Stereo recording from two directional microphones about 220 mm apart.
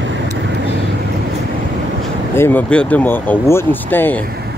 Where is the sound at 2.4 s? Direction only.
10° left (ahead or behind).